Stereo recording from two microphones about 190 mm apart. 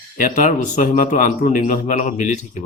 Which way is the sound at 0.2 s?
45° left (ahead or behind).